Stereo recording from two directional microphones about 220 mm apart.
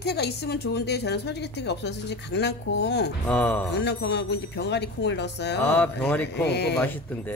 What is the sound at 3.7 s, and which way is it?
Speech, 50° left (ahead or behind).